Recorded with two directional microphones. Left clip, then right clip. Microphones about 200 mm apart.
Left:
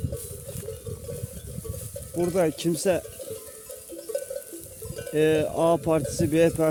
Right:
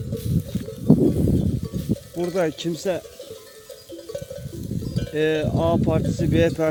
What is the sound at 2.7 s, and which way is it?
Speech, 15° left (ahead or behind).